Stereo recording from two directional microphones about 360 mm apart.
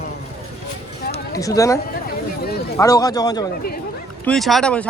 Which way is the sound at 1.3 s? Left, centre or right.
Centre.